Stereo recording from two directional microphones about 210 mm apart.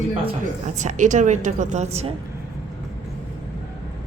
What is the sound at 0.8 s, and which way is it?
A woman's voice, 35° right (ahead or behind).